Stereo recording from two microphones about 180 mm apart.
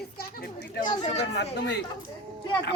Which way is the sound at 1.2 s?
75° left (ahead or behind).